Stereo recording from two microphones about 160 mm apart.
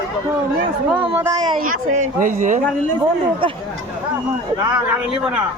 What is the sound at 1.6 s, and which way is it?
Speech, 55° right (ahead or behind).